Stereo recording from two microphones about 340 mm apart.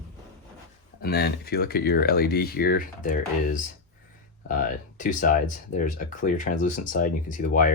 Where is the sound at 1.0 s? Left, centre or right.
Left.